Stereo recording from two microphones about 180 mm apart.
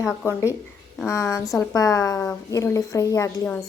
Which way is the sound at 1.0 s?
15° left (ahead or behind).